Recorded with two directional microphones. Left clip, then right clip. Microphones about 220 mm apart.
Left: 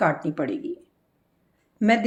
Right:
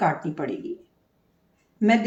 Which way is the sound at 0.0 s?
50° left (ahead or behind).